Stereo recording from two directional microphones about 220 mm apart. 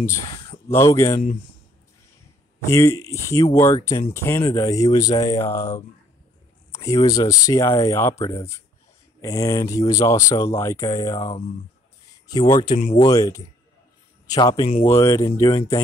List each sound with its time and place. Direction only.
0.7 s speech: 15° left (ahead or behind)
2.6 s speech: 15° left (ahead or behind)
12.7 s speech: 35° left (ahead or behind)
13.0 s speech: 15° left (ahead or behind)
14.9 s speech: 15° left (ahead or behind)